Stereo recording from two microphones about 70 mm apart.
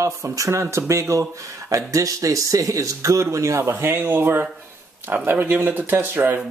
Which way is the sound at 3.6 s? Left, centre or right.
Right.